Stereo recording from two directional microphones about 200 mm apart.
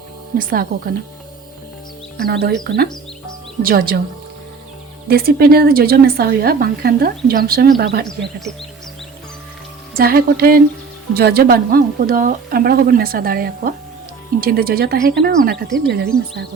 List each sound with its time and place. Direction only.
0.3 s a woman's voice: 45° right (ahead or behind)
2.2 s a woman's voice: 55° right (ahead or behind)
5.0 s a woman's voice: 50° right (ahead or behind)
9.9 s a woman's voice: 50° right (ahead or behind)